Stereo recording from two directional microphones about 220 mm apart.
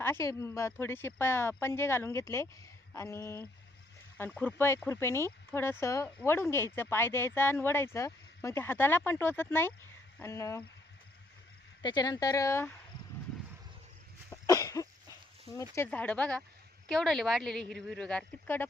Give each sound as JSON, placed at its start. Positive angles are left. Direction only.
{"t": 0.0, "sound": "speech", "side_deg": 10}
{"t": 11.8, "sound": "speech", "side_deg": 20}
{"t": 14.3, "sound": "cough", "side_deg": 15}
{"t": 15.7, "sound": "speech", "side_deg": 10}